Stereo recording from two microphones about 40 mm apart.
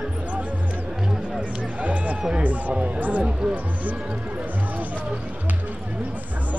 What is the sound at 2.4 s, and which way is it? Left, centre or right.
Speech, right.